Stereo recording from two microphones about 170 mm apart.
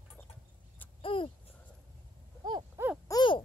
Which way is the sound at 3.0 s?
25° left (ahead or behind).